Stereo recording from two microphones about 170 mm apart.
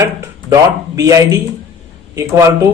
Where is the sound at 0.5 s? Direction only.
20° right (ahead or behind).